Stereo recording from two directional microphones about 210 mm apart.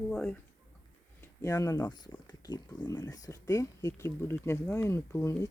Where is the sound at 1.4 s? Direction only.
15° left (ahead or behind).